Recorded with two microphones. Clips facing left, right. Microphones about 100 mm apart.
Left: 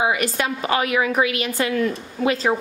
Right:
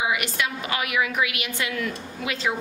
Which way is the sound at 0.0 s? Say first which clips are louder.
Left 5 dB; 40° left (ahead or behind).